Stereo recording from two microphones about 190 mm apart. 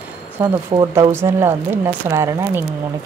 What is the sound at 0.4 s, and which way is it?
Speech, 15° right (ahead or behind).